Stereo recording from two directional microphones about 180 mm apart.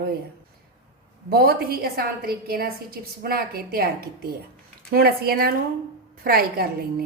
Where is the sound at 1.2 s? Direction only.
60° right (ahead or behind).